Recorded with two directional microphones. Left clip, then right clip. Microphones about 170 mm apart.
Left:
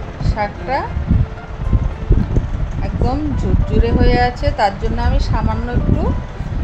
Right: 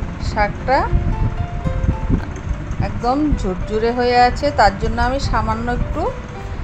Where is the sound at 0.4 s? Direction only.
15° right (ahead or behind).